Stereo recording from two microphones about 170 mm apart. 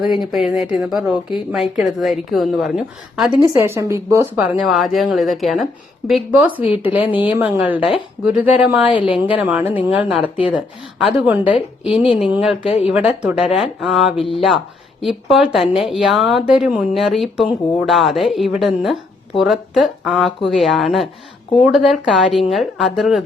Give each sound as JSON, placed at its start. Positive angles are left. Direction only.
{"t": 0.0, "sound": "speech", "side_deg": 0}
{"t": 3.4, "sound": "a woman's voice", "side_deg": -15}
{"t": 4.6, "sound": "a woman's voice", "side_deg": 0}